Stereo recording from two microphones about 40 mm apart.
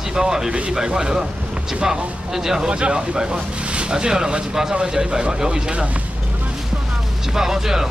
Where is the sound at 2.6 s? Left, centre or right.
Right.